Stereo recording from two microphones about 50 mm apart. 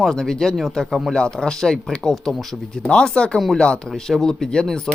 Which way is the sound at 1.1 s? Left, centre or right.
Centre.